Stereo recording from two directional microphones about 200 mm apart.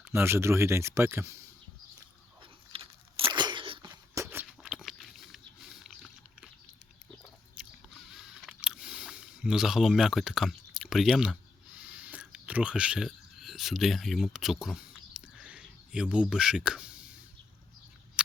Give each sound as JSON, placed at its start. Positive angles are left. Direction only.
{"t": 0.0, "sound": "speech", "side_deg": -10}
{"t": 2.4, "sound": "crunch", "side_deg": -25}
{"t": 4.6, "sound": "biting", "side_deg": 0}
{"t": 5.8, "sound": "a sound", "side_deg": 0}
{"t": 7.5, "sound": "chewing", "side_deg": 0}
{"t": 11.8, "sound": "a sound", "side_deg": -5}
{"t": 16.3, "sound": "speech", "side_deg": -5}